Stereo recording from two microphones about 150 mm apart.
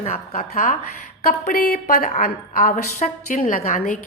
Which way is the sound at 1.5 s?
85° left.